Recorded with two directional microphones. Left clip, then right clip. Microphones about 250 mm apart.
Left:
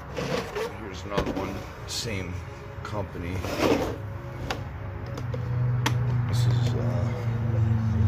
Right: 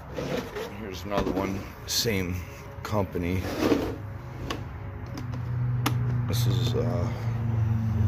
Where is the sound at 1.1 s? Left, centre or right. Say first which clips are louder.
Right 1 dB; right.